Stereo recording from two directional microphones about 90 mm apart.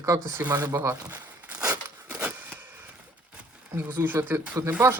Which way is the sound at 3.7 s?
25° right (ahead or behind).